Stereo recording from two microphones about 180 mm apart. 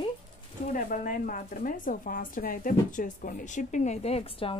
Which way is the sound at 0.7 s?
50° left (ahead or behind).